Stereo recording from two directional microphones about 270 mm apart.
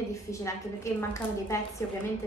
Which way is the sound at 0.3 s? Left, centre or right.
Centre.